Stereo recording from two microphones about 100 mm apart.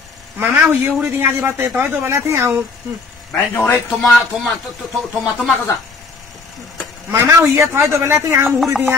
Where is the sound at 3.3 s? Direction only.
20° left (ahead or behind).